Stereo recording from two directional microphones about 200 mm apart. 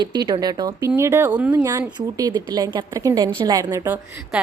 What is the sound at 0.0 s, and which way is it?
A woman's voice, 20° right (ahead or behind).